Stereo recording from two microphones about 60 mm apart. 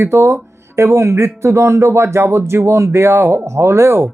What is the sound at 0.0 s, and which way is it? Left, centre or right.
Speech, right.